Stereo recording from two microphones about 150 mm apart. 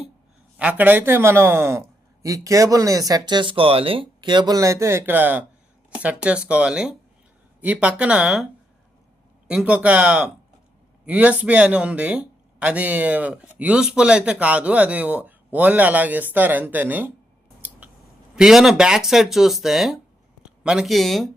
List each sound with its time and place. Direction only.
0.5 s speech: 10° right (ahead or behind)
9.5 s speech: 5° right (ahead or behind)
17.6 s scissors: 10° right (ahead or behind)
18.3 s speech: 5° right (ahead or behind)